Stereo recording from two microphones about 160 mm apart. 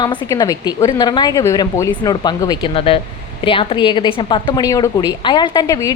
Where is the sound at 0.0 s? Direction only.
25° left (ahead or behind).